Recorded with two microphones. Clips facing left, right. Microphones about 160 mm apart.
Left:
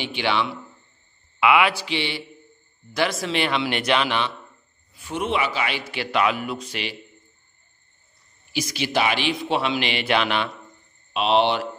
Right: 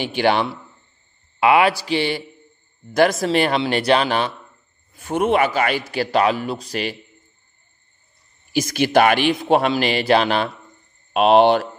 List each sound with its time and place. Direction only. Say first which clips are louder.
0.0 s a man's voice: right 6 dB; 45° right (ahead or behind)
8.5 s a man's voice: right 8 dB; 50° right (ahead or behind)
11.1 s a man's voice: right 7 dB; 50° right (ahead or behind)